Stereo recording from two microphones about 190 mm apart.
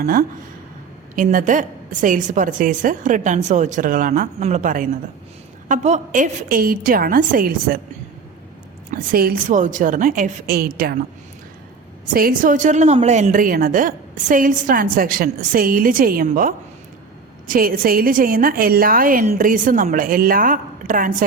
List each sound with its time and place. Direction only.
0.0 s a woman's voice: 55° right (ahead or behind)
8.9 s a woman's voice: 50° right (ahead or behind)
12.1 s a woman's voice: 45° right (ahead or behind)